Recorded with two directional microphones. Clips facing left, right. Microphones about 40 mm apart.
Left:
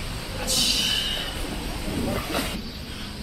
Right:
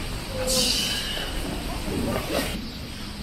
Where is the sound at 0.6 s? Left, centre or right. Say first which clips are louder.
Left 2 dB; left.